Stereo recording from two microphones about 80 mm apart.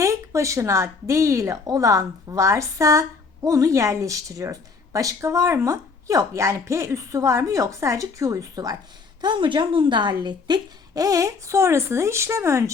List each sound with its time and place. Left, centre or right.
0.0 s a woman's voice: right
9.2 s a woman's voice: right